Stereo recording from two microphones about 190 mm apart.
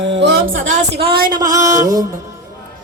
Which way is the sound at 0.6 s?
40° right (ahead or behind).